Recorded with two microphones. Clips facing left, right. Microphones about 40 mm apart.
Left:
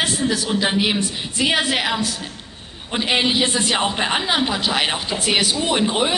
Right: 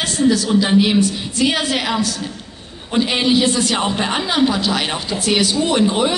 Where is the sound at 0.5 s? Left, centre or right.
Centre.